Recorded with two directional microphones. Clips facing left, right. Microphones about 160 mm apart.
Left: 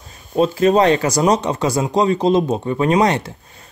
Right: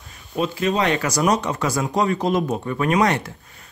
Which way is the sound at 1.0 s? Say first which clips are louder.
Left 4 dB; 20° left (ahead or behind).